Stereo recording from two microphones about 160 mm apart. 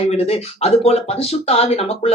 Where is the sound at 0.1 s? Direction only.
40° left (ahead or behind).